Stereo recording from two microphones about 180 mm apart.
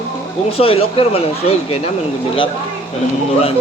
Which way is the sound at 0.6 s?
30° left (ahead or behind).